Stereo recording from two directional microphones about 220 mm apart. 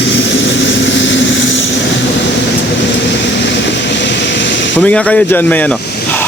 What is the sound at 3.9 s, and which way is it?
Vehicle, 55° left (ahead or behind).